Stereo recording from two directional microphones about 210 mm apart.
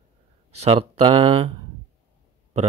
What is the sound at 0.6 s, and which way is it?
Speech, 30° right (ahead or behind).